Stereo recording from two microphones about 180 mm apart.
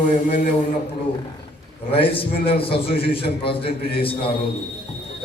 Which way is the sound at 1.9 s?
30° left (ahead or behind).